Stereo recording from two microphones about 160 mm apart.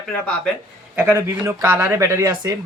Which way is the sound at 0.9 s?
15° right (ahead or behind).